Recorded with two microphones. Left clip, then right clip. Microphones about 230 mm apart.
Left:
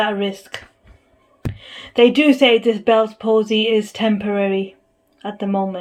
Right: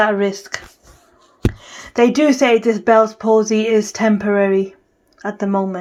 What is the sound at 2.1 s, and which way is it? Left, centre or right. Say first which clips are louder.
Speech: even; centre.